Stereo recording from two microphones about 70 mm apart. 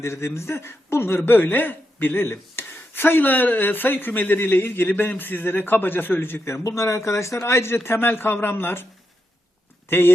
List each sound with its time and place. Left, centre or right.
0.0 s speech: left
6.7 s speech: left